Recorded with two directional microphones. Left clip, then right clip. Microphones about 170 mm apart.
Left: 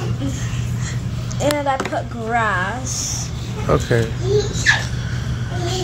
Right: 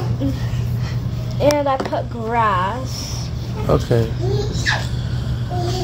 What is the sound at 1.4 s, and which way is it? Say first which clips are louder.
Speech: right 3 dB; 65° right (ahead or behind).